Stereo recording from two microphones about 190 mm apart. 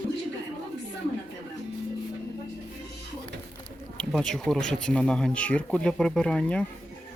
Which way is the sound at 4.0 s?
5° left (ahead or behind).